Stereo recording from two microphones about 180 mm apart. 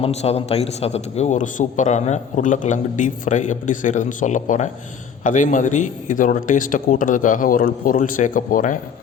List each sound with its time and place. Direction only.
0.0 s a man's voice: 35° left (ahead or behind)